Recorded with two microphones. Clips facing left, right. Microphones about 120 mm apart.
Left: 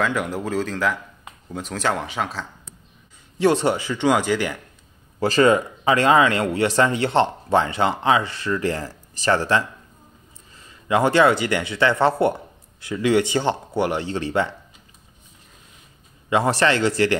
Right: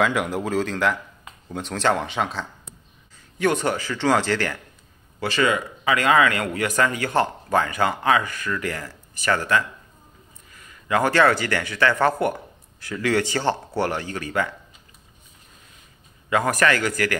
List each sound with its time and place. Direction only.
0.0 s speech: centre (ahead or behind)
3.3 s speech: 25° left (ahead or behind)
5.2 s speech: 40° left (ahead or behind)
16.3 s speech: 25° left (ahead or behind)